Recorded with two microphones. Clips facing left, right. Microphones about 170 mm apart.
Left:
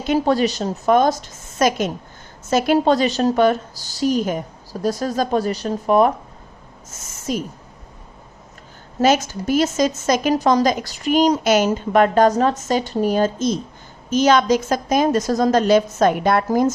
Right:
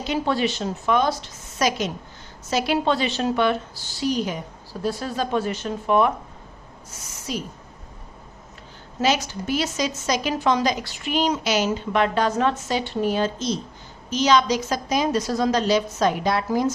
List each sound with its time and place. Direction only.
0.0 s a woman's voice: 45° left (ahead or behind)
9.0 s a woman's voice: 45° left (ahead or behind)